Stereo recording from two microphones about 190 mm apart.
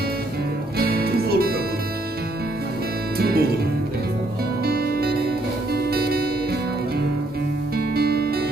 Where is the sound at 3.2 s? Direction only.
55° right (ahead or behind).